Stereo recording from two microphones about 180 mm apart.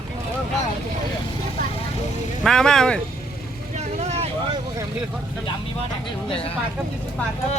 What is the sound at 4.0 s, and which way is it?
Vehicle, 35° right (ahead or behind).